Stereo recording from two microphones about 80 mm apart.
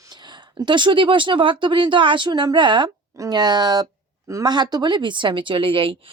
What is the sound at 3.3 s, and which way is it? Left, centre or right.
A woman's voice, right.